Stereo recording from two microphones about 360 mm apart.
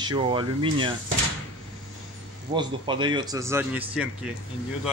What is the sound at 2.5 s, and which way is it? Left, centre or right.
A man's voice, centre.